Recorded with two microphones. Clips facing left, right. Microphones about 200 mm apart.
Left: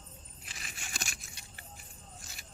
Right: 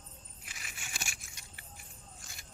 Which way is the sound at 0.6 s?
35° left (ahead or behind).